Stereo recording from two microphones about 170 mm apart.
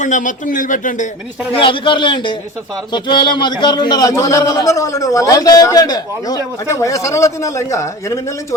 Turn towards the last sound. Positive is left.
turn(degrees=20)  # may be behind; listen again after turning